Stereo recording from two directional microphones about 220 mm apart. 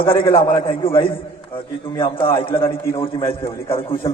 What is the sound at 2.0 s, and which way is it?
A man's voice, 25° left (ahead or behind).